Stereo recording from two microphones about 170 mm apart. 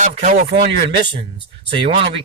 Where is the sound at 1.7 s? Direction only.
30° right (ahead or behind).